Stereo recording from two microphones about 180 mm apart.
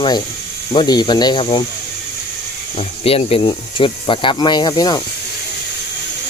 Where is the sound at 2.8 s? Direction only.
30° left (ahead or behind).